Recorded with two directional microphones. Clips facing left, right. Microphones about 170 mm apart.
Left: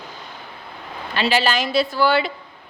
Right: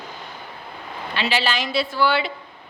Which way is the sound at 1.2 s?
45° left (ahead or behind).